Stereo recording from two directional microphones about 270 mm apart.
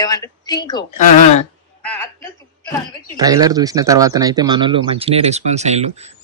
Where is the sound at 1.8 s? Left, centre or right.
Centre.